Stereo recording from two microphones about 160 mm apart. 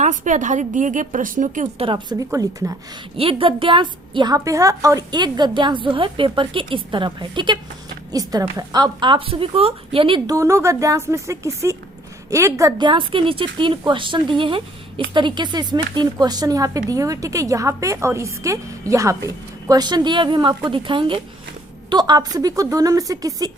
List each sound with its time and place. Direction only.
0.0 s a woman's voice: 50° right (ahead or behind)
1.8 s a woman's voice: 30° right (ahead or behind)
3.2 s a woman's voice: 35° right (ahead or behind)
10.3 s a woman's voice: 20° right (ahead or behind)
12.9 s a woman's voice: 30° right (ahead or behind)